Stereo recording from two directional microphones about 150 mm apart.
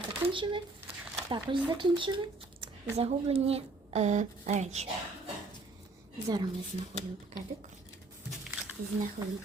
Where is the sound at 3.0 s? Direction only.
45° right (ahead or behind).